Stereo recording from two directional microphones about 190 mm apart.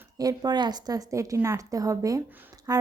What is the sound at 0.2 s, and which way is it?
A woman's voice, 20° right (ahead or behind).